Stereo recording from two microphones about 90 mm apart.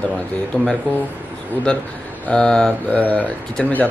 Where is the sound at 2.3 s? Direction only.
10° left (ahead or behind).